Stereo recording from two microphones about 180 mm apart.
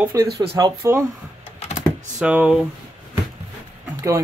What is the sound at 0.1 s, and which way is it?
Speech, 15° right (ahead or behind).